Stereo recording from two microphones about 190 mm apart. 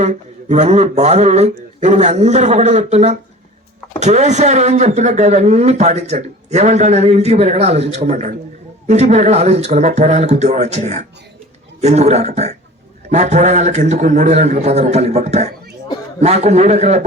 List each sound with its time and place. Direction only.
0.0 s speech: 35° right (ahead or behind)